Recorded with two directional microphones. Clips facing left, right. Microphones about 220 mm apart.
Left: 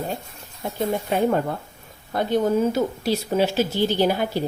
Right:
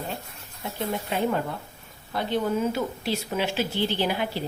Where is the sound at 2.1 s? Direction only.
45° left (ahead or behind).